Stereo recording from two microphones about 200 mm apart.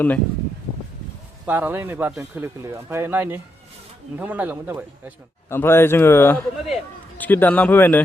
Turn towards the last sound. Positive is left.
turn(degrees=10)  # may be behind; listen again after turning